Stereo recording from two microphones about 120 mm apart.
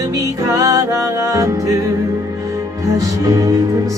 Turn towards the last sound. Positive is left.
turn(degrees=-30)  # may be behind; listen again after turning